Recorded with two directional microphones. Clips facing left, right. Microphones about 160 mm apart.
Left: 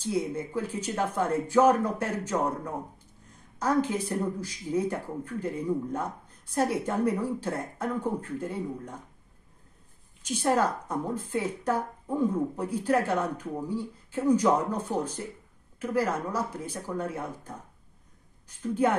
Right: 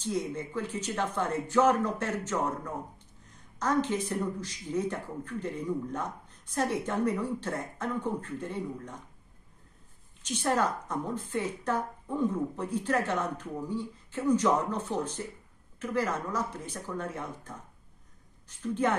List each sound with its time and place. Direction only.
0.0 s speech: 10° left (ahead or behind)
10.6 s speech: 10° left (ahead or behind)